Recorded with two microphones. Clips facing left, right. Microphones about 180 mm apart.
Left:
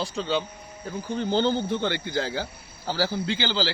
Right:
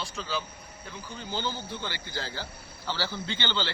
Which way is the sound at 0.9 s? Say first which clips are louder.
Left 11 dB; 50° left (ahead or behind).